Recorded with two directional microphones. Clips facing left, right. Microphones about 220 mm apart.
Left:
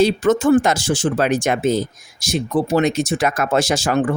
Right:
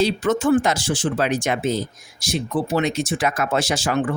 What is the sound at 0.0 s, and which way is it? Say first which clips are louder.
Speech: left 4 dB; 45° left (ahead or behind).